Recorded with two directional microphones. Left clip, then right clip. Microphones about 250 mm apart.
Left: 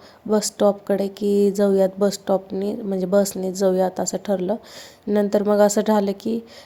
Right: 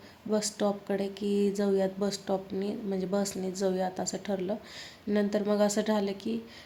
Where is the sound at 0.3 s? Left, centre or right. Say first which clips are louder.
Left 11 dB; centre.